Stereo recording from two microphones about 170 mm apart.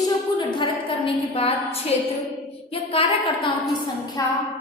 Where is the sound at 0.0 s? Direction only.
25° left (ahead or behind).